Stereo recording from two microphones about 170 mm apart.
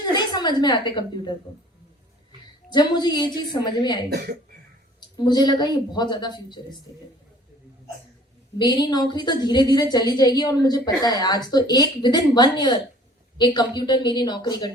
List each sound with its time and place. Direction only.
0.0 s a woman's voice: 25° left (ahead or behind)
2.6 s a woman's voice: 25° left (ahead or behind)
4.1 s speech: 70° right (ahead or behind)
4.9 s a woman's voice: 25° left (ahead or behind)
8.5 s a woman's voice: 25° left (ahead or behind)